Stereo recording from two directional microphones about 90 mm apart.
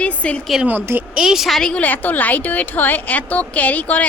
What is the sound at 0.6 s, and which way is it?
Speech, 20° right (ahead or behind).